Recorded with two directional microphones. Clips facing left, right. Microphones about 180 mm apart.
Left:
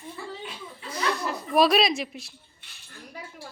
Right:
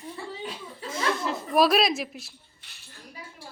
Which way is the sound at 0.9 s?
25° right (ahead or behind).